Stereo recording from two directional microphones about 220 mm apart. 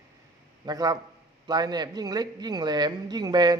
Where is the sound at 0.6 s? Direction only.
15° right (ahead or behind).